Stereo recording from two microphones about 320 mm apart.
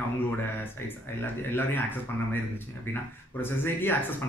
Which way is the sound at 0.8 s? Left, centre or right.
Centre.